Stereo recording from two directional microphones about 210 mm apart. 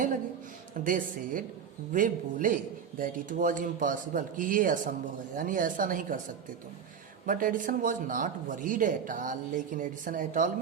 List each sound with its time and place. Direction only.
0.9 s speech: 40° right (ahead or behind)
7.3 s speech: 40° right (ahead or behind)